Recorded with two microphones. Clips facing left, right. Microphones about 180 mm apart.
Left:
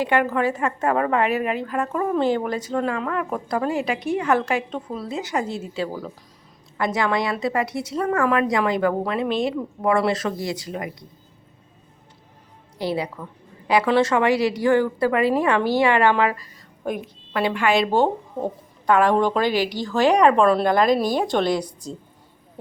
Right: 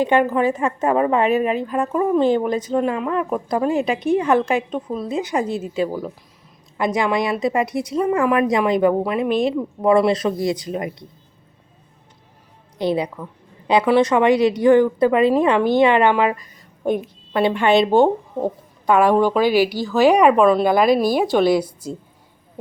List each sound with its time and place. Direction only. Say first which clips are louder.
0.0 s a woman's voice: right 4 dB; 20° right (ahead or behind)
12.8 s a woman's voice: right 4 dB; 20° right (ahead or behind)